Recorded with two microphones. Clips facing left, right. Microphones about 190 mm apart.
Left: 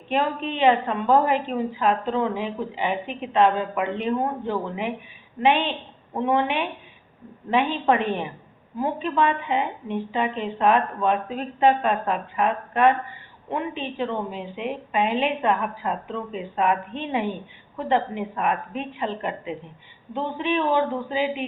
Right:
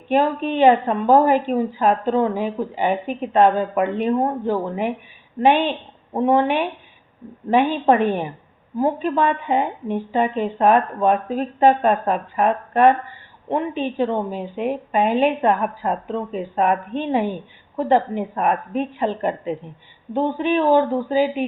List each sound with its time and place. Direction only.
0.1 s speech: 40° right (ahead or behind)
17.7 s speech: 40° right (ahead or behind)